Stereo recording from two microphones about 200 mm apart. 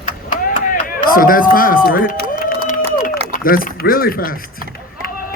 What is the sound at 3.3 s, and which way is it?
A man's voice, 45° left (ahead or behind).